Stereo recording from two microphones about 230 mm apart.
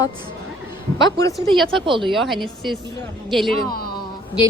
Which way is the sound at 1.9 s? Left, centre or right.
Right.